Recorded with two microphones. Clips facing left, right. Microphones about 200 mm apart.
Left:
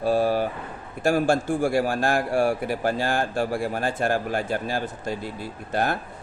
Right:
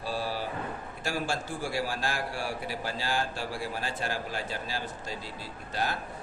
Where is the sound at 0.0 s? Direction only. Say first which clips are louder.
Left 12 dB; 55° left (ahead or behind).